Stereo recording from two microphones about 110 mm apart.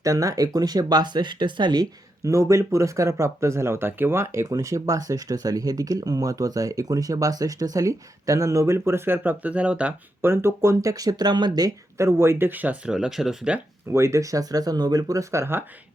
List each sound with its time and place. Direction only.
0.0 s speech: 30° right (ahead or behind); by 9.9 s 10° right (ahead or behind)
10.2 s speech: 20° right (ahead or behind); by 13.6 s 5° right (ahead or behind)
13.9 s speech: 25° right (ahead or behind)